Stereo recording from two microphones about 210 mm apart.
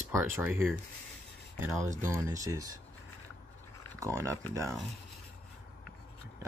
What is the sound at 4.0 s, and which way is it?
Speech, 15° right (ahead or behind).